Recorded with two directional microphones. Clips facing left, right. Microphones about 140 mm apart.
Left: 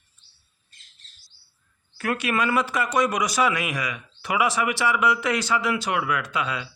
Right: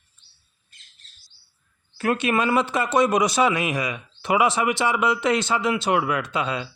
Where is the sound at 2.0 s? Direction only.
25° right (ahead or behind).